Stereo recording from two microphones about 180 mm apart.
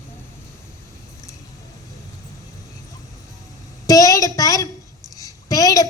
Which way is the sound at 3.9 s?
20° left (ahead or behind).